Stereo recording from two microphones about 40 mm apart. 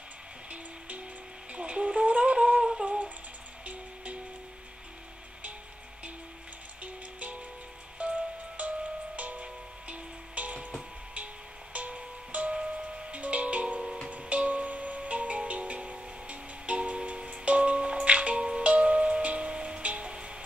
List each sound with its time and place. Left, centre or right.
0.5 s music: right
1.5 s a sound: right
2.6 s a sound: centre
3.6 s music: right
6.8 s music: right
8.5 s music: right
11.7 s music: right